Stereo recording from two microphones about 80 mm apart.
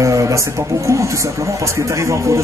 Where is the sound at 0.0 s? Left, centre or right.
Right.